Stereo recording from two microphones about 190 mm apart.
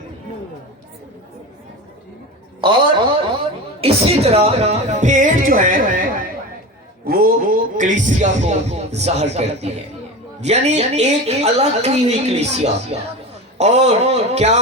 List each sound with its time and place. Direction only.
2.6 s a man's voice: 25° right (ahead or behind); by 6.0 s 45° right (ahead or behind)
7.1 s a man's voice: 50° right (ahead or behind)